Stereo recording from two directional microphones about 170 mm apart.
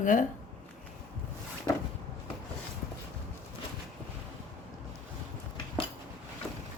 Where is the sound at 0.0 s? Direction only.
50° left (ahead or behind).